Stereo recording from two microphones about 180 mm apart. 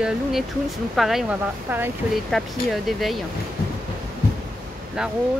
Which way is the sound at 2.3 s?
Centre (ahead or behind).